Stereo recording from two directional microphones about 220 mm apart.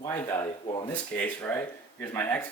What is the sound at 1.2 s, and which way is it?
Speech, 5° left (ahead or behind).